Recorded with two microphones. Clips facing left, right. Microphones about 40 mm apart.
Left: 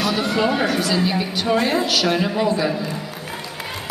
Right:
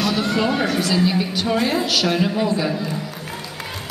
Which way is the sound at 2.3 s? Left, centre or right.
Centre.